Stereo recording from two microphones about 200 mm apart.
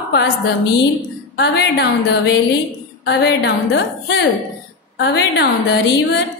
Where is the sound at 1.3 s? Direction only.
55° left (ahead or behind).